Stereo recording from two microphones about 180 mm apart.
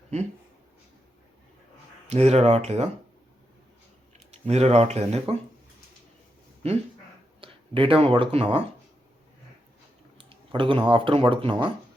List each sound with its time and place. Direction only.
2.0 s speech: 35° right (ahead or behind)
4.3 s speech: 35° right (ahead or behind)
6.6 s speech: 35° right (ahead or behind)
10.2 s speech: 30° right (ahead or behind)